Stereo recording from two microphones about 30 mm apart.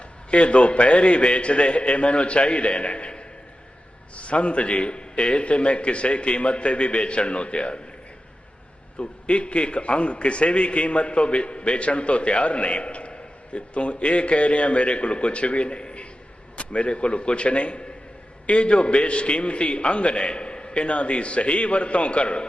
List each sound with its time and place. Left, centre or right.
0.3 s a man's voice: left
9.0 s a man's voice: left